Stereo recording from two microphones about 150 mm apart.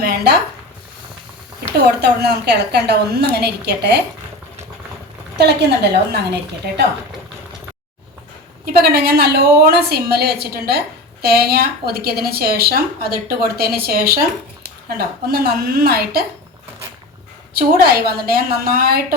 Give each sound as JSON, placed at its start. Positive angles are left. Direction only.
{"t": 0.0, "sound": "a sound", "side_deg": -90}
{"t": 2.0, "sound": "a woman's voice", "side_deg": -90}
{"t": 5.4, "sound": "a woman's voice", "side_deg": -90}
{"t": 8.6, "sound": "a woman's voice", "side_deg": -90}
{"t": 17.7, "sound": "a woman's voice", "side_deg": -85}